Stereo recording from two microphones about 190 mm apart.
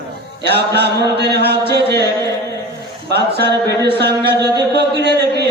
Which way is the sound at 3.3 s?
60° right (ahead or behind).